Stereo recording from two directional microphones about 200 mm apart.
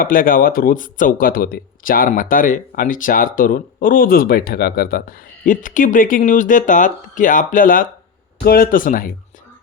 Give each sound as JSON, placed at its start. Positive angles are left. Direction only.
{"t": 0.0, "sound": "speech", "side_deg": 45}